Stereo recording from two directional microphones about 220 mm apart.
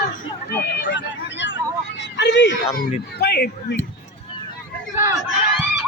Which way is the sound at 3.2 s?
45° left (ahead or behind).